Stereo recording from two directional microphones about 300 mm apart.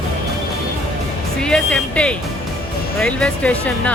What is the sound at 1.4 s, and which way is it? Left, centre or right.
Music, centre.